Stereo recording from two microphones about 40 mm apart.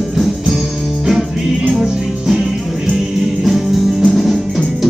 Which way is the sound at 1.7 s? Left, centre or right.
Centre.